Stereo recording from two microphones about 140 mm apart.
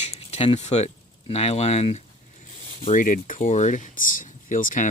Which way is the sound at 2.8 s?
70° left (ahead or behind).